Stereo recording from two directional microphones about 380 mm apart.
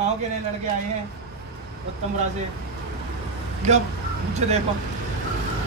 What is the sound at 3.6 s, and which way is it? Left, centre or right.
Speech, centre.